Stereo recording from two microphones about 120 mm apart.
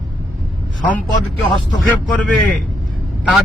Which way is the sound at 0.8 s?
10° left (ahead or behind).